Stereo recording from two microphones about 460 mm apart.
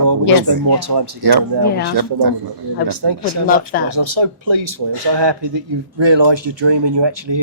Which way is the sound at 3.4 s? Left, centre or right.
Centre.